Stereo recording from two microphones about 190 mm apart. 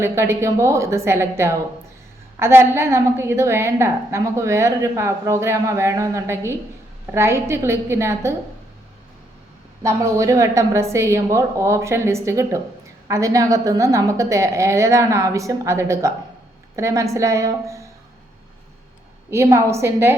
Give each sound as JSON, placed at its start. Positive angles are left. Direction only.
{"t": 0.0, "sound": "a woman's voice", "side_deg": -15}
{"t": 9.8, "sound": "a woman's voice", "side_deg": -15}
{"t": 19.3, "sound": "a woman's voice", "side_deg": -15}